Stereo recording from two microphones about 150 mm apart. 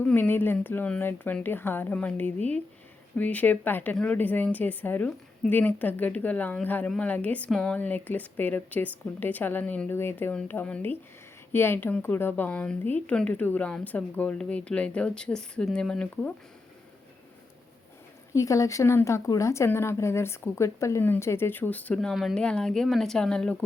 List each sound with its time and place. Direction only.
0.0 s a woman's voice: 10° left (ahead or behind)
18.3 s a woman's voice: 20° left (ahead or behind); by 23.6 s 5° left (ahead or behind)